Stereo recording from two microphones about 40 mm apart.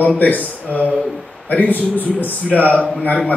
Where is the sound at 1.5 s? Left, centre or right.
Left.